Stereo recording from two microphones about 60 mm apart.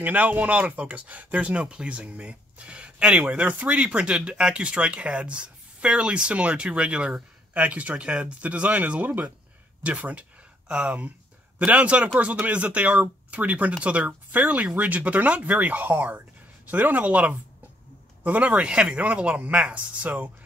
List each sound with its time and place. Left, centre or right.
0.0 s speech: right